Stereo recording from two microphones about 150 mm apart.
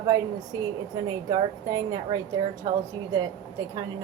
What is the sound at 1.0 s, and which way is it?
A woman's voice, 25° right (ahead or behind).